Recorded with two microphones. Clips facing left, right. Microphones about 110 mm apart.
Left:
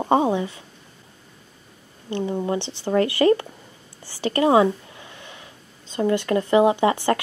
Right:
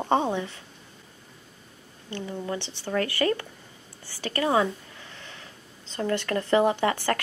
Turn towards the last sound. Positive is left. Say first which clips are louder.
# left 5 dB
turn(degrees=20)  # may be behind; listen again after turning